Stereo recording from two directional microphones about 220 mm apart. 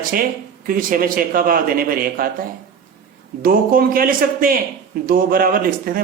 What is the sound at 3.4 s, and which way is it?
Speech, 40° right (ahead or behind).